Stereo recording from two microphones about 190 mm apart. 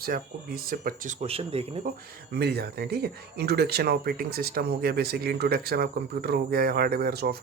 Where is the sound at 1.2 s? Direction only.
30° right (ahead or behind).